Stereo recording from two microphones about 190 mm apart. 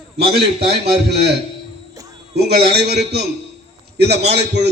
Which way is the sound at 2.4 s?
55° right (ahead or behind).